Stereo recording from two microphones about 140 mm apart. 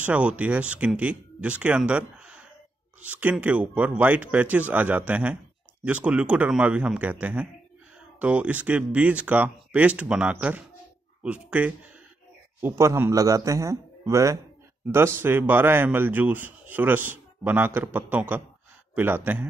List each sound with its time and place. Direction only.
0.0 s a man's voice: 10° right (ahead or behind)